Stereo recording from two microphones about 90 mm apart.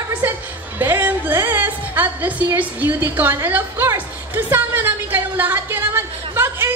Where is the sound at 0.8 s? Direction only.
20° right (ahead or behind).